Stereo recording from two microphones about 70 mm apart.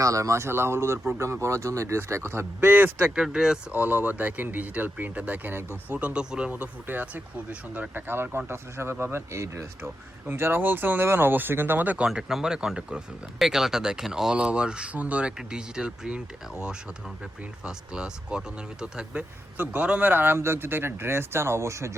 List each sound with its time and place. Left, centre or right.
0.0 s speech: right
3.2 s speech: centre
3.7 s speech: right
12.0 s speech: centre
19.5 s speech: right